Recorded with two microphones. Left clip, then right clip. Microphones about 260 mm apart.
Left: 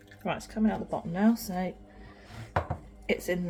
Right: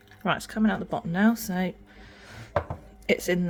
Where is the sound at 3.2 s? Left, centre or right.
Right.